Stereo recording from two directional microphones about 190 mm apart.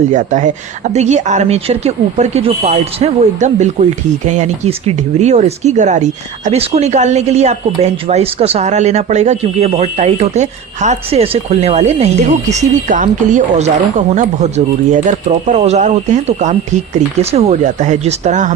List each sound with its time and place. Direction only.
0.1 s speech: 40° right (ahead or behind)